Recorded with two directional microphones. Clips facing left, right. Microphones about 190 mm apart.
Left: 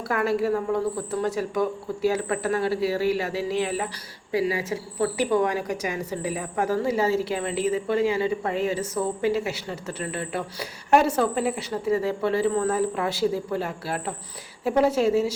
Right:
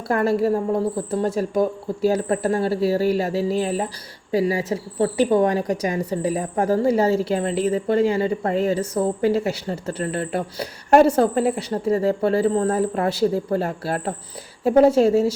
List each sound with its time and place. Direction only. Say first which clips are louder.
0.1 s a woman's voice: right 4 dB; 40° right (ahead or behind)